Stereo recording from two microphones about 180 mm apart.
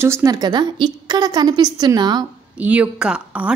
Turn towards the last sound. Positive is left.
turn(degrees=-5)  # may be behind; listen again after turning